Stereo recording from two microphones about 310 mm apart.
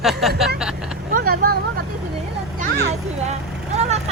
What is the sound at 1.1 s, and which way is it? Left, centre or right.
Speech, right.